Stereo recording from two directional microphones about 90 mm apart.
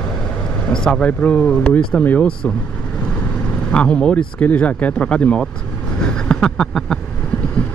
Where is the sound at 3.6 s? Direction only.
15° left (ahead or behind).